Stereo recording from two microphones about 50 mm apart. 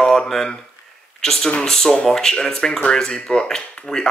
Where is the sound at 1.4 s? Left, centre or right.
Centre.